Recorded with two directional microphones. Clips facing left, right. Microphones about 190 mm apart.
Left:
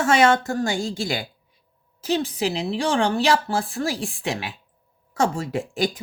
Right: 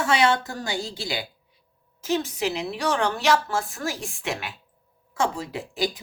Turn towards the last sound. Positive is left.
turn(degrees=50)  # may be behind; listen again after turning